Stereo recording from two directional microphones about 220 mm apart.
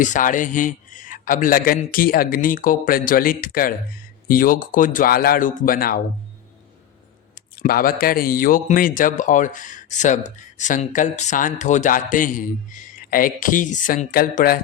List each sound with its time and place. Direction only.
0.0 s speech: 35° left (ahead or behind)
7.5 s speech: 40° left (ahead or behind)